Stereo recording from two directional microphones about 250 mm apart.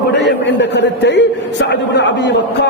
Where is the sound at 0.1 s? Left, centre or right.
Left.